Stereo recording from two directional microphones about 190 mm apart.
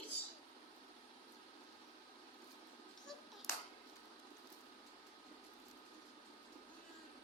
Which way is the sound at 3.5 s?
15° left (ahead or behind).